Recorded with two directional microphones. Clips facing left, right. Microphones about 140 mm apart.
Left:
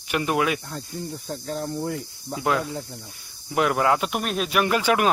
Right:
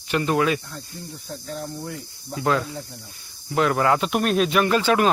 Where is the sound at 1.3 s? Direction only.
45° left (ahead or behind).